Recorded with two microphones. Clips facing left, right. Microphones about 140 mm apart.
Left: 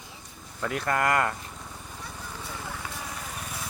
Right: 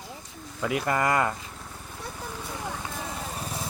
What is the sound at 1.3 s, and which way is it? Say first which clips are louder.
Vehicle: even; centre (ahead or behind).